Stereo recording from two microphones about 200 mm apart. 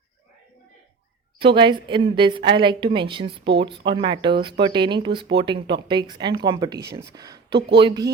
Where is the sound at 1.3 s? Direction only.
25° right (ahead or behind).